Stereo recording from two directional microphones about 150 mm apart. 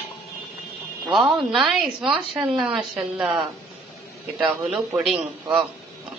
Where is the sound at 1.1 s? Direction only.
Centre (ahead or behind).